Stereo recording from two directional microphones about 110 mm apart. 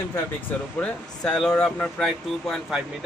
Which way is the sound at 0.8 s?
5° left (ahead or behind).